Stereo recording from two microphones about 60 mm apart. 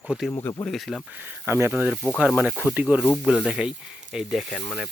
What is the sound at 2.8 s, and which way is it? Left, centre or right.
Speech, right.